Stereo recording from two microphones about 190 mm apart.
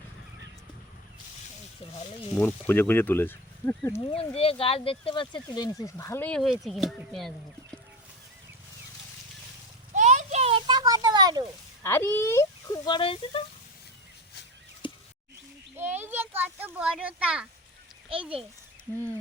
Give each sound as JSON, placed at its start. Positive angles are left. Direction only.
{"t": 2.3, "sound": "speech", "side_deg": 10}
{"t": 4.0, "sound": "speech", "side_deg": 30}
{"t": 9.9, "sound": "a sound", "side_deg": -40}
{"t": 11.8, "sound": "speech", "side_deg": 15}
{"t": 15.8, "sound": "speech", "side_deg": -10}
{"t": 18.1, "sound": "speech", "side_deg": -30}